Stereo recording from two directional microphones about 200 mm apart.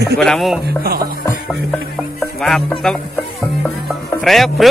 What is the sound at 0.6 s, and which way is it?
Speech, 50° right (ahead or behind).